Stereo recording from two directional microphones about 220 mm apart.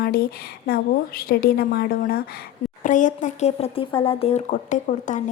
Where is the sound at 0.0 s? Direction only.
45° left (ahead or behind).